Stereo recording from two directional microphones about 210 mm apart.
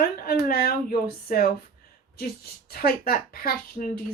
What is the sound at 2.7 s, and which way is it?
Speech, 45° left (ahead or behind).